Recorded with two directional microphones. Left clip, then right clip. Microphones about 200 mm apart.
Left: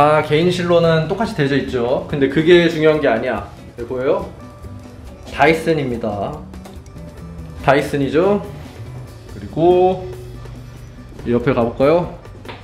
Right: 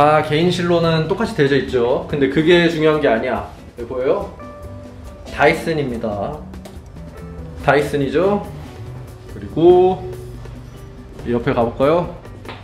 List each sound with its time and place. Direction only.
0.0 s speech: 5° left (ahead or behind)
5.3 s speech: 15° left (ahead or behind)
7.6 s speech: 15° left (ahead or behind)
9.6 s speech: 5° left (ahead or behind)
11.2 s speech: 15° left (ahead or behind)